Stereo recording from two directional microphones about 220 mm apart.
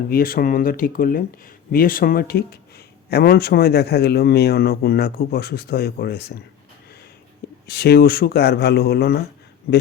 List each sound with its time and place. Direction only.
0.1 s speech: 40° left (ahead or behind)
7.7 s speech: 45° left (ahead or behind)